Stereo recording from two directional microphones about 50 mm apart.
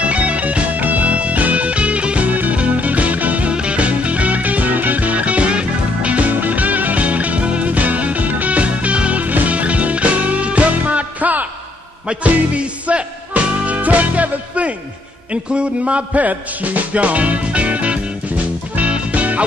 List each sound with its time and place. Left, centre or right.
0.0 s music: right